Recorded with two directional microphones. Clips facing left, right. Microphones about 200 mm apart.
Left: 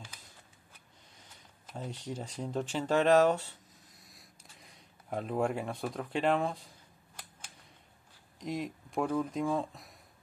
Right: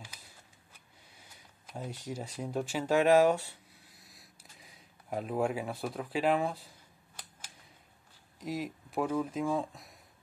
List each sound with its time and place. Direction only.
1.8 s speech: 10° right (ahead or behind)
8.4 s speech: 5° right (ahead or behind)